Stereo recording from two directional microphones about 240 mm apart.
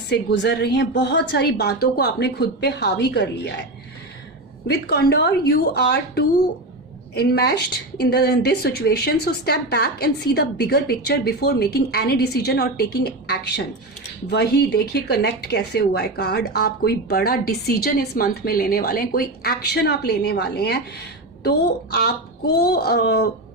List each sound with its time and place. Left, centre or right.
0.1 s a woman's voice: left
4.6 s a woman's voice: left
22.5 s a woman's voice: left